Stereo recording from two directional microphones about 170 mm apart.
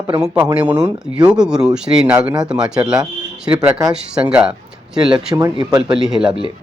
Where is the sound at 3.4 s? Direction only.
10° right (ahead or behind).